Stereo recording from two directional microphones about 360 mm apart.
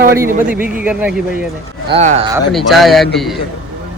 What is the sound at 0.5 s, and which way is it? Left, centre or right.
Speech, left.